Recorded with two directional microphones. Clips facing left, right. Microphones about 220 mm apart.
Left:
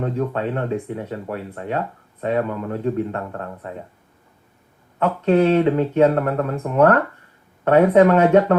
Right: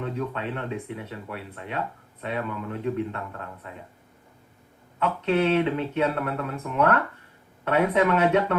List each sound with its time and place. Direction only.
0.0 s speech: 45° left (ahead or behind)
4.9 s speech: 40° left (ahead or behind)